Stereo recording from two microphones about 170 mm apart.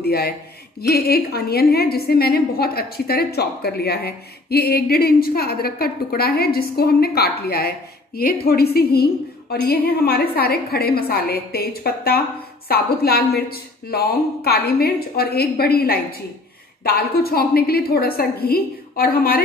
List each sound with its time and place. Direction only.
0.0 s a man's voice: 70° left (ahead or behind)